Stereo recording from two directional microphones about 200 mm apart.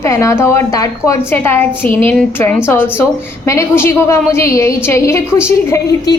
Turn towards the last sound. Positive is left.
turn(degrees=15)  # may be behind; listen again after turning